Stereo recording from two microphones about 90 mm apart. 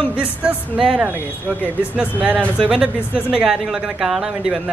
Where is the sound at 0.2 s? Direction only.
15° right (ahead or behind).